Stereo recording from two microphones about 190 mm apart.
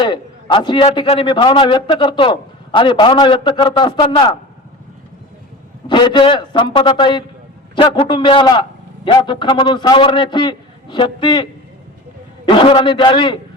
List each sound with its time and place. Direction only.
0.0 s a man's voice: 25° left (ahead or behind)
5.9 s a man's voice: 25° left (ahead or behind)
12.5 s a man's voice: 25° left (ahead or behind)